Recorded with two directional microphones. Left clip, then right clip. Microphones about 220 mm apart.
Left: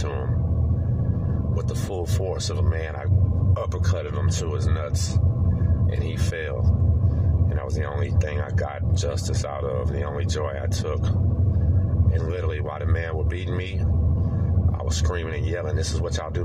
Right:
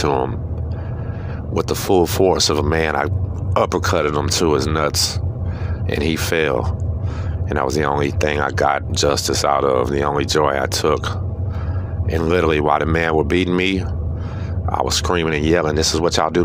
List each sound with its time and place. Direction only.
1.5 s speech: 40° right (ahead or behind)
6.0 s speech: 45° right (ahead or behind)
12.3 s speech: 45° right (ahead or behind)